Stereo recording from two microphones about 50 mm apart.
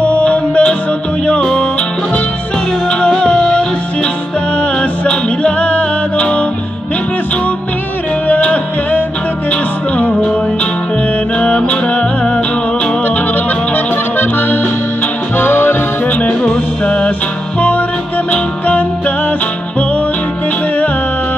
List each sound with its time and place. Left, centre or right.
0.0 s music: left
2.9 s music: centre
5.0 s music: left
8.3 s music: left
11.3 s music: left
14.1 s music: left
15.3 s accordion: left
16.8 s music: centre
17.6 s music: left